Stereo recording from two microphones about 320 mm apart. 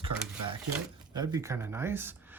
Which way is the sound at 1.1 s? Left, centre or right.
Centre.